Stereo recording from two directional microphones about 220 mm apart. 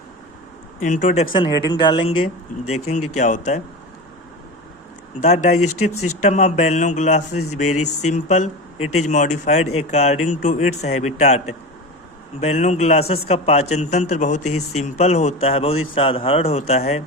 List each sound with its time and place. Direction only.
0.8 s speech: 35° left (ahead or behind)
2.1 s speech: 75° left (ahead or behind)
3.2 s a man's voice: 35° left (ahead or behind)
5.2 s a man's voice: 30° left (ahead or behind)
5.5 s speech: 90° left
6.2 s a man's voice: 30° left (ahead or behind)
7.7 s speech: 90° left
8.1 s a man's voice: 30° left (ahead or behind)
14.4 s speech: 90° left
14.8 s speech: 30° left (ahead or behind)